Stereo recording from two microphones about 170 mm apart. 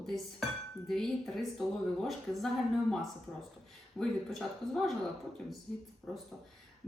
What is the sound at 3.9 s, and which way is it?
A woman's voice, centre (ahead or behind).